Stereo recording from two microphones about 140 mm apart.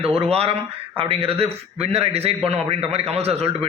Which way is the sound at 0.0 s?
45° right (ahead or behind).